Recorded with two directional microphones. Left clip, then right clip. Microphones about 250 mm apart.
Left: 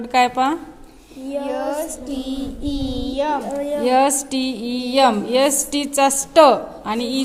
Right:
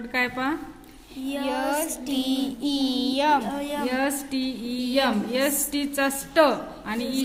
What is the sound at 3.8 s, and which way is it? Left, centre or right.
Speech, left.